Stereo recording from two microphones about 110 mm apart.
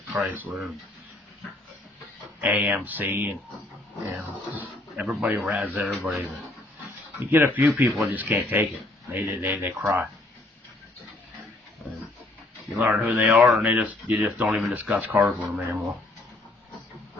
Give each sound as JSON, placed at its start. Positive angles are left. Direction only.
{"t": 0.1, "sound": "speech", "side_deg": -15}
{"t": 2.4, "sound": "speech", "side_deg": -10}
{"t": 4.5, "sound": "speech", "side_deg": -15}
{"t": 5.8, "sound": "speech", "side_deg": -5}
{"t": 7.2, "sound": "speech", "side_deg": -20}
{"t": 13.0, "sound": "speech", "side_deg": -15}